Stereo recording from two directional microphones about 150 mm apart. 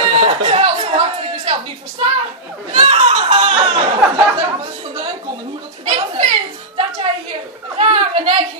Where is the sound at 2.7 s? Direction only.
40° right (ahead or behind).